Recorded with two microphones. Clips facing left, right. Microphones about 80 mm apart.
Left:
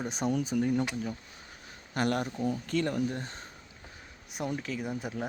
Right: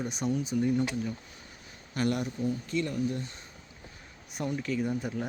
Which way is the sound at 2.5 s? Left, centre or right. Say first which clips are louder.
Left 1 dB; left.